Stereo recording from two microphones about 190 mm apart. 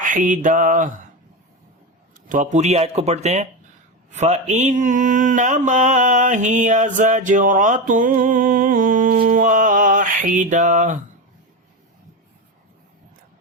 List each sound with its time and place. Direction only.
0.0 s mantra: 45° right (ahead or behind)
2.3 s speech: 40° right (ahead or behind)
4.1 s mantra: 35° right (ahead or behind)